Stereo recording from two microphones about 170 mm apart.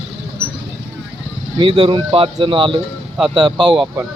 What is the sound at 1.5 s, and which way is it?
Speech, 30° right (ahead or behind).